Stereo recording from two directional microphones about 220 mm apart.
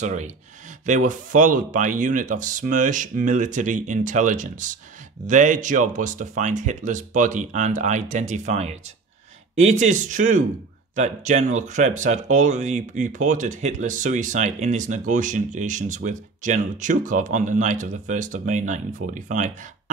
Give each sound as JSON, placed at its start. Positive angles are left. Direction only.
{"t": 0.0, "sound": "speech", "side_deg": -30}